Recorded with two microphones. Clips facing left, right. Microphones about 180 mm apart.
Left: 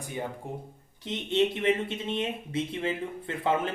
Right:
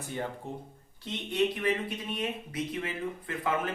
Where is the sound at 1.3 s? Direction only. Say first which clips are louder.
Left 3 dB; 25° left (ahead or behind).